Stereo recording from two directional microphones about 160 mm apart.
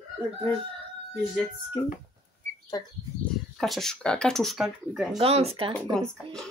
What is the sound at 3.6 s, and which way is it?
Speech, centre (ahead or behind).